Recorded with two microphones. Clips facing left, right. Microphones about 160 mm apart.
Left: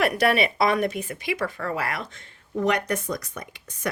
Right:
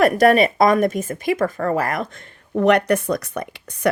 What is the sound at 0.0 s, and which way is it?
A woman's voice, 45° right (ahead or behind).